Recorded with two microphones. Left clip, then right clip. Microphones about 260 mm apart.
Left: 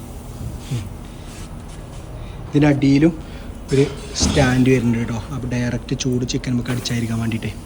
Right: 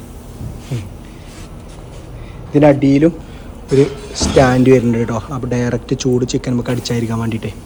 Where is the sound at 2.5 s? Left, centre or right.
Centre.